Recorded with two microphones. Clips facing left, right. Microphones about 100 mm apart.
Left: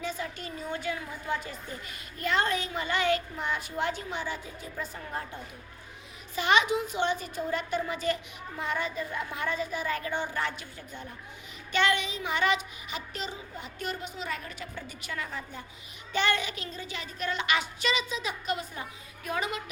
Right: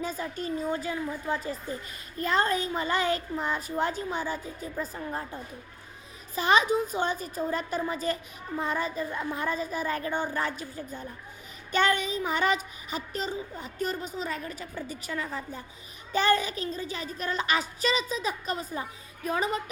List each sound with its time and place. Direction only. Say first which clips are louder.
0.0 s a woman's voice: right 3 dB; 40° right (ahead or behind)
6.3 s a woman's voice: right 2 dB; 35° right (ahead or behind)